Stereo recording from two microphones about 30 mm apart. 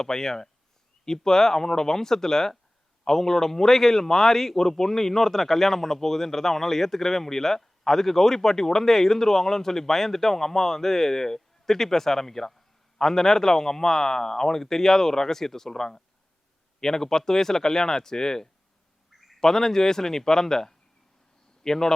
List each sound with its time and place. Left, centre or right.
0.0 s a man's voice: centre
19.1 s bird: centre
19.4 s a man's voice: centre